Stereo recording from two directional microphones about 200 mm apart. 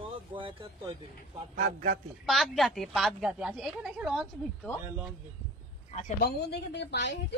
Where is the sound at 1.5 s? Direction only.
45° right (ahead or behind).